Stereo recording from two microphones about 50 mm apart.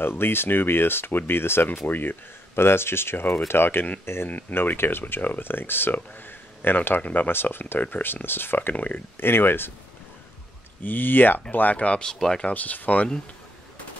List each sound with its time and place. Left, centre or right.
0.0 s speech: left
4.3 s speech: left
4.6 s speech: left
7.0 s speech: left
7.2 s speech: left
8.7 s speech: left
9.2 s speech: left
10.8 s speech: left; by 12.4 s centre
12.4 s speech: left